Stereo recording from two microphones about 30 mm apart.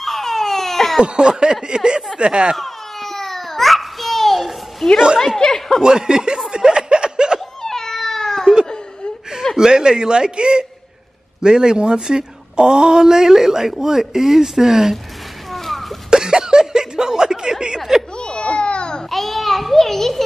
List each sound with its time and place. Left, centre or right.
0.0 s baby cry: centre
1.0 s a woman's voice: right
2.5 s babbling: centre
4.8 s a woman's voice: centre
5.4 s speech: left
5.8 s a woman's voice: right
6.5 s snicker: right
7.6 s cat: centre
9.6 s a woman's voice: right
15.5 s a sound: centre
16.1 s a sound: right
17.7 s snicker: centre
18.1 s a sound: left
19.0 s a sound: centre